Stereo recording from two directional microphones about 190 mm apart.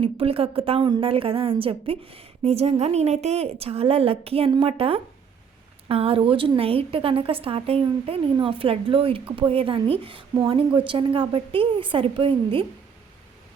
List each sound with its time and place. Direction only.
0.0 s a woman's voice: 30° right (ahead or behind)